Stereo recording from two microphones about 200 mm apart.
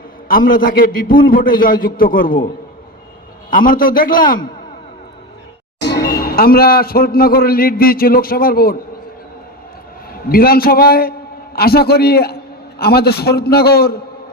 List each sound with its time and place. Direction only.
0.3 s a man's voice: 45° left (ahead or behind)
3.5 s a man's voice: 45° left (ahead or behind)
5.8 s a man's voice: 55° left (ahead or behind)
10.1 s a man's voice: 50° left (ahead or behind)